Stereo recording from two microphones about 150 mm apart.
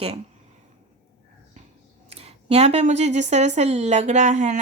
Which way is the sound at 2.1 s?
45° right (ahead or behind).